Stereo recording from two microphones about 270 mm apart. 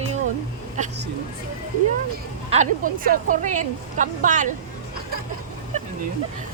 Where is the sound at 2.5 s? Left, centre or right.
Right.